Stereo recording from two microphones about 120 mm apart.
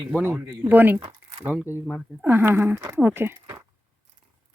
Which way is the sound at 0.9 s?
40° right (ahead or behind).